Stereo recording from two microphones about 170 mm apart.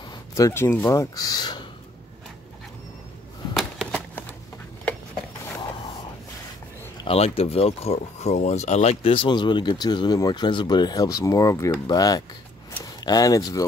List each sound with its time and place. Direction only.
0.1 s speech: 20° left (ahead or behind)
3.5 s a sound: centre (ahead or behind)
7.1 s speech: 35° left (ahead or behind); by 13.7 s 20° left (ahead or behind)